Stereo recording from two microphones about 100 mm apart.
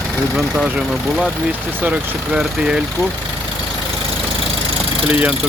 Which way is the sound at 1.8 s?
15° right (ahead or behind).